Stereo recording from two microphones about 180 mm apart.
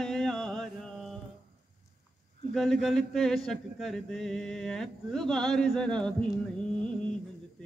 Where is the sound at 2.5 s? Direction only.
Centre (ahead or behind).